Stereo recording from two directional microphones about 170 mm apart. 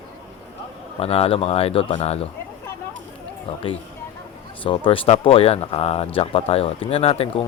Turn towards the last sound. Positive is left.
turn(degrees=35)  # may be behind; listen again after turning